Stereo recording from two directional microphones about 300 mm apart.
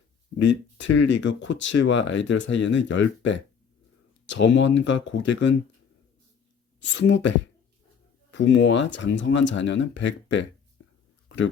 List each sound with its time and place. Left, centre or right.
0.4 s speech: left
6.7 s speech: left